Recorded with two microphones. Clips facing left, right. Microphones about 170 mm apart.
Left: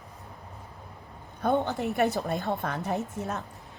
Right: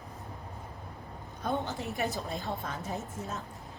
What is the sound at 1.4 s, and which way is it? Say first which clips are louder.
A woman's voice: left 7 dB; 65° left (ahead or behind).